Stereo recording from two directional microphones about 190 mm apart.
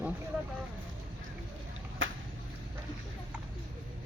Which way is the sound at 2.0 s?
90° right.